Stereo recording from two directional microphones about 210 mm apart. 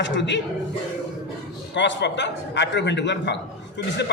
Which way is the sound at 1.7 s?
55° left (ahead or behind).